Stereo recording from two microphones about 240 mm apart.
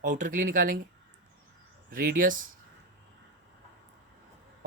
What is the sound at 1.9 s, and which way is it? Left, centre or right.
Speech, right.